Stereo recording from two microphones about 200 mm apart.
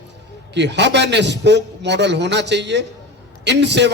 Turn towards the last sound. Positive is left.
turn(degrees=-60)  # may be behind; listen again after turning